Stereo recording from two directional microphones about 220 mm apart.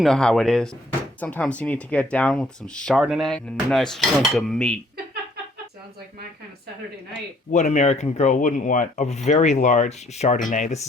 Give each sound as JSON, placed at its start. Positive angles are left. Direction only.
{"t": 0.0, "sound": "speech", "side_deg": 0}
{"t": 7.5, "sound": "speech", "side_deg": 30}